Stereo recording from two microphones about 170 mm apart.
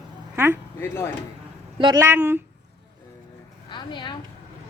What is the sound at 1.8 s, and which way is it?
Speech, 20° right (ahead or behind).